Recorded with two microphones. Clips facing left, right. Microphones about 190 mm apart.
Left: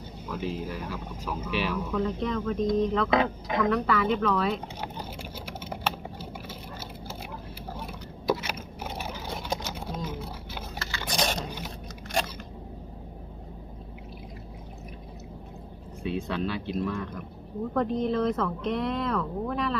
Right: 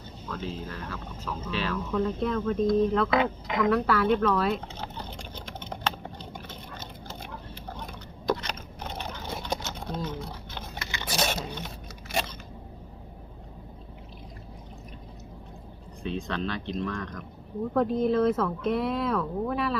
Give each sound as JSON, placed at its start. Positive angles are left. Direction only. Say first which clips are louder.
{"t": 0.3, "sound": "speech", "louder": "left 3 dB", "side_deg": 10}
{"t": 2.0, "sound": "speech", "louder": "right 1 dB", "side_deg": -5}
{"t": 4.8, "sound": "typing", "louder": "left 2 dB", "side_deg": 10}
{"t": 8.3, "sound": "a sound", "louder": "left 1 dB", "side_deg": 10}
{"t": 9.4, "sound": "horse", "louder": "even", "side_deg": 5}
{"t": 11.0, "sound": "a sound", "louder": "even", "side_deg": -5}
{"t": 12.1, "sound": "crunch", "louder": "left 1 dB", "side_deg": -5}
{"t": 16.0, "sound": "speech", "louder": "left 1 dB", "side_deg": 10}